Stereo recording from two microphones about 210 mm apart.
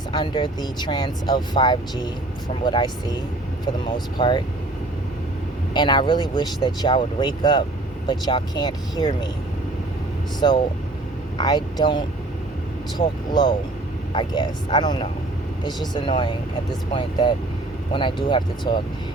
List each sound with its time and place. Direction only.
0.1 s speech: 20° left (ahead or behind)
5.7 s speech: 20° left (ahead or behind)
10.4 s speech: 25° left (ahead or behind)